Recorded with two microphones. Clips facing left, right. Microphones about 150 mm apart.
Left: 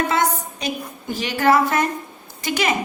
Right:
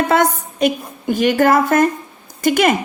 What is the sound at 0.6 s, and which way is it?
A woman's voice, 55° right (ahead or behind).